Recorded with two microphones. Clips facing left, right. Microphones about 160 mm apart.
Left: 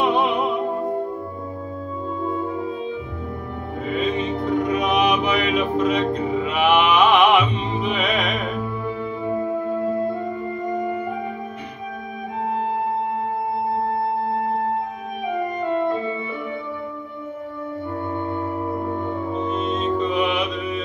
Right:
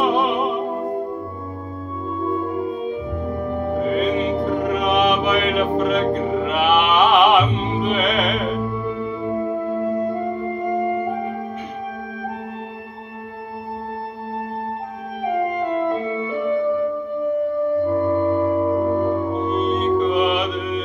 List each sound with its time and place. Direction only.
0.0 s music: centre (ahead or behind)
4.0 s music: centre (ahead or behind)
4.7 s mantra: centre (ahead or behind)
5.8 s music: centre (ahead or behind)
19.0 s music: 5° right (ahead or behind)